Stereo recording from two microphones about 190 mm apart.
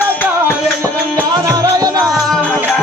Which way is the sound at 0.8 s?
15° right (ahead or behind).